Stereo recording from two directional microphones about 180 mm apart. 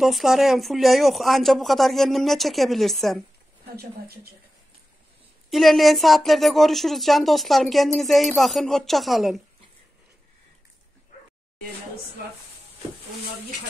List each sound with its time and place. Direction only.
0.0 s speech: centre (ahead or behind)
3.7 s a woman's voice: 60° right (ahead or behind)
5.5 s speech: centre (ahead or behind)